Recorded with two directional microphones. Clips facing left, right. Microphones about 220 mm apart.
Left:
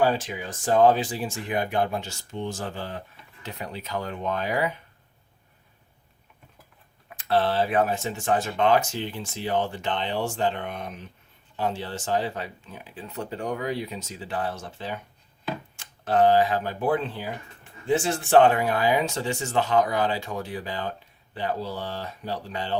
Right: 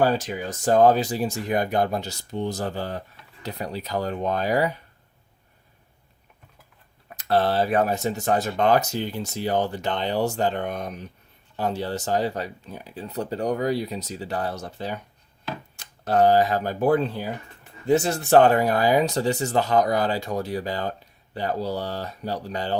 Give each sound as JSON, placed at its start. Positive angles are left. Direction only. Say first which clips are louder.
{"t": 0.0, "sound": "speech", "louder": "right 2 dB", "side_deg": -40}
{"t": 7.2, "sound": "speech", "louder": "right 2 dB", "side_deg": -40}